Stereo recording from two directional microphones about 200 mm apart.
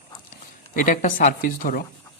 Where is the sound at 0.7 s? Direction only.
40° left (ahead or behind).